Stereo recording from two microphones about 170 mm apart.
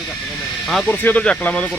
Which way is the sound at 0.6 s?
5° left (ahead or behind).